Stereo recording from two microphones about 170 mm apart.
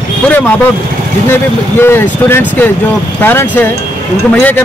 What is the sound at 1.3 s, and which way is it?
Speech, 15° left (ahead or behind).